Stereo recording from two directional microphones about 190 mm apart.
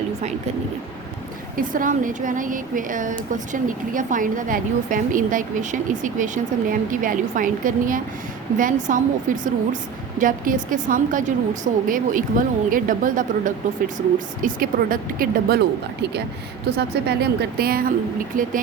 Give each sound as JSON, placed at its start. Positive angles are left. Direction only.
{"t": 1.5, "sound": "speech", "side_deg": -45}